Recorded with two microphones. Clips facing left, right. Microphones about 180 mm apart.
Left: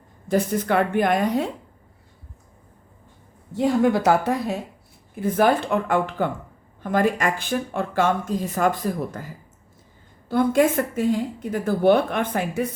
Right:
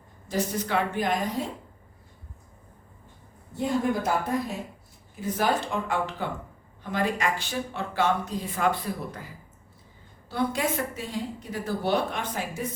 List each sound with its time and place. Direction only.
0.3 s a woman's voice: 55° left (ahead or behind)
3.5 s a woman's voice: 80° left
5.2 s speech: 55° left (ahead or behind)